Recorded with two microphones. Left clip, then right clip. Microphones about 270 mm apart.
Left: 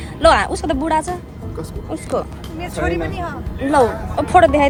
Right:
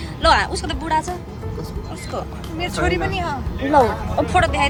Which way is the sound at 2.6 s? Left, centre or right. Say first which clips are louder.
Right 1 dB; centre.